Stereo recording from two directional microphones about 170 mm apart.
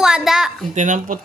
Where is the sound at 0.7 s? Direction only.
45° right (ahead or behind).